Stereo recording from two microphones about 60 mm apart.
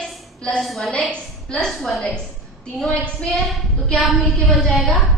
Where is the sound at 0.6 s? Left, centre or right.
Centre.